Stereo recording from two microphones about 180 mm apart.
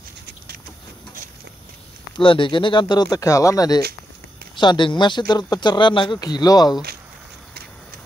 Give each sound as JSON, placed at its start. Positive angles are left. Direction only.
{"t": 2.1, "sound": "speech", "side_deg": 25}